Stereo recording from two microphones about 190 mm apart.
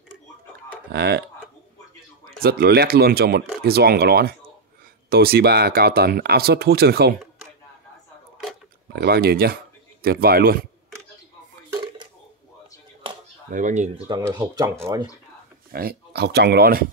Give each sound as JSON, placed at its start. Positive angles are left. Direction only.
{"t": 0.9, "sound": "speech", "side_deg": -60}
{"t": 2.4, "sound": "speech", "side_deg": -55}
{"t": 8.9, "sound": "speech", "side_deg": -55}
{"t": 13.0, "sound": "chop", "side_deg": -25}
{"t": 13.5, "sound": "speech", "side_deg": -40}
{"t": 14.0, "sound": "speech", "side_deg": -20}
{"t": 15.7, "sound": "speech", "side_deg": -50}